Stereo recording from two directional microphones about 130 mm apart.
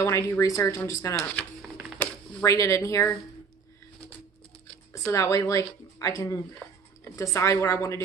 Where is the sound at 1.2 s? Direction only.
10° left (ahead or behind).